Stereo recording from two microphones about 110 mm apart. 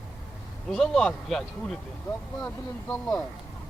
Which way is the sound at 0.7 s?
5° left (ahead or behind).